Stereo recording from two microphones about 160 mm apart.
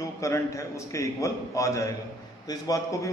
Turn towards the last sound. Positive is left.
turn(degrees=20)  # may be behind; listen again after turning